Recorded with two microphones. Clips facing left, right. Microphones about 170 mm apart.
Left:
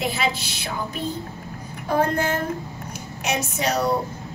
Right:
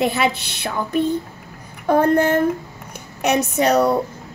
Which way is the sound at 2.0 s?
60° right (ahead or behind).